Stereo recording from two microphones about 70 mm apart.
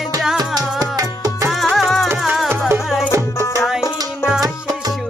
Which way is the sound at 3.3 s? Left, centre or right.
Left.